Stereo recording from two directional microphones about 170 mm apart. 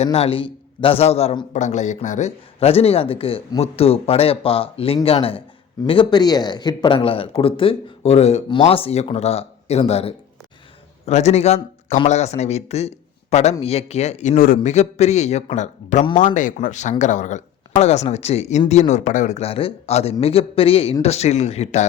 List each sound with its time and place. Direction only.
0.0 s a man's voice: 35° left (ahead or behind)